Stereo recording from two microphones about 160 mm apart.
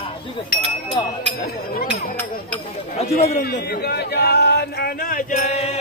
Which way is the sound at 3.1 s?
75° left (ahead or behind).